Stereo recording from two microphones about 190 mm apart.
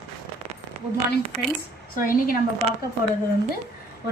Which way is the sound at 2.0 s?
50° left (ahead or behind).